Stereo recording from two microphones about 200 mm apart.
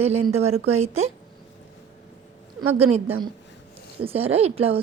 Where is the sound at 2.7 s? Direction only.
30° right (ahead or behind).